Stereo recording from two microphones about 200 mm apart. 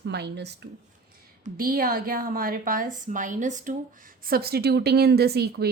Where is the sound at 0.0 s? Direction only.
55° right (ahead or behind).